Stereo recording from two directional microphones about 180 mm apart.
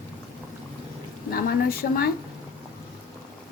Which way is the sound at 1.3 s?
55° left (ahead or behind).